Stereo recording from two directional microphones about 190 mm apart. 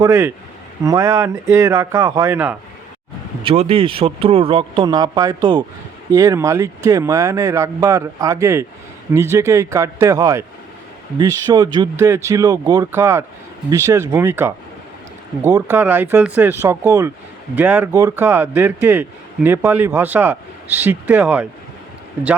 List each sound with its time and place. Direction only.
0.0 s speech: 15° right (ahead or behind)
3.4 s speech: 30° right (ahead or behind); by 21.4 s 5° right (ahead or behind)